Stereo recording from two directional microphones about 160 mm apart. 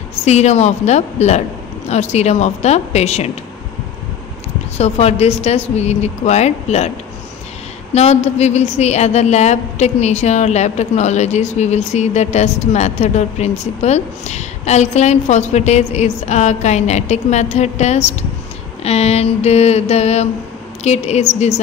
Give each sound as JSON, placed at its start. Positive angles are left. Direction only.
{"t": 0.2, "sound": "a woman's voice", "side_deg": 45}
{"t": 4.7, "sound": "a woman's voice", "side_deg": 40}
{"t": 7.9, "sound": "a woman's voice", "side_deg": 45}
{"t": 18.9, "sound": "mantra", "side_deg": 40}
{"t": 20.8, "sound": "a woman's voice", "side_deg": 45}